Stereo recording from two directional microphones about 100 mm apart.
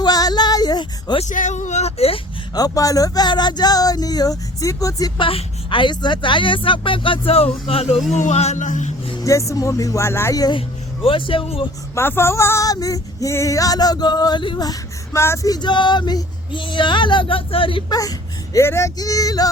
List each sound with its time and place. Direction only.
0.0 s female singing: 40° left (ahead or behind)
1.8 s speech: 85° left
2.6 s female singing: 35° left (ahead or behind)
5.2 s a woman's voice: 65° left (ahead or behind)
8.3 s a sound: 90° left
9.2 s female singing: 30° left (ahead or behind)
11.0 s a woman's voice: 60° left (ahead or behind)
11.9 s female singing: 25° left (ahead or behind)
15.2 s female singing: 30° left (ahead or behind); by 17.9 s 60° left (ahead or behind)
17.9 s speech: 35° left (ahead or behind)
18.9 s female singing: 35° left (ahead or behind)